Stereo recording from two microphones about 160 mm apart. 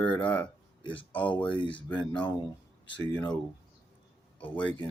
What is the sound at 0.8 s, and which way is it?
Speech, 35° left (ahead or behind).